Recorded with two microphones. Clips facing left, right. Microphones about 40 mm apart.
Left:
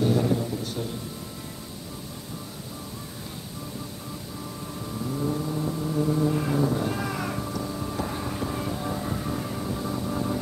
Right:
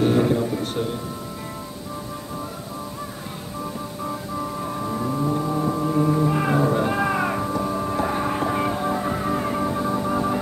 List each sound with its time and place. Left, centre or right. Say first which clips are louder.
0.0 s speech: right 5 dB; right
4.8 s music: right 4 dB; right